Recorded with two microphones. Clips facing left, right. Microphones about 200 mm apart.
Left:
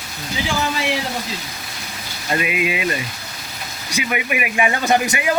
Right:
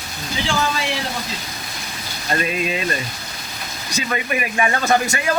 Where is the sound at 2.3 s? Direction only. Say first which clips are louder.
Left 1 dB; 15° left (ahead or behind).